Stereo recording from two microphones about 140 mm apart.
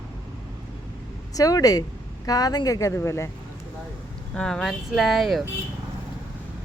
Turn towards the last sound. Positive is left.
turn(degrees=0)  # may be behind; listen again after turning